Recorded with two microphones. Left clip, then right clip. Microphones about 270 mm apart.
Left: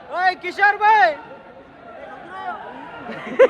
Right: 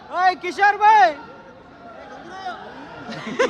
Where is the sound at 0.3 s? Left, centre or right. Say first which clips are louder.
Even; right.